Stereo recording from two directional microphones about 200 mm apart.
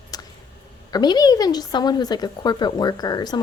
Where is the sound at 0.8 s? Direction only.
20° left (ahead or behind).